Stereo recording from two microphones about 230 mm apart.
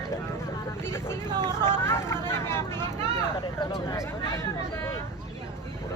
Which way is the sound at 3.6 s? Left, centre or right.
Centre.